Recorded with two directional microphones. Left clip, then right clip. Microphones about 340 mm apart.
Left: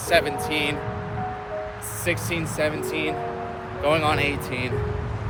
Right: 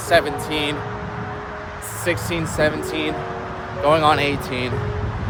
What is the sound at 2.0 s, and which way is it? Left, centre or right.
Speech, centre.